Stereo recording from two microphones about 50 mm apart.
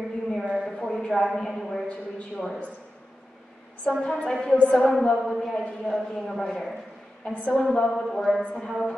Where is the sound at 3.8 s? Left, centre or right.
Centre.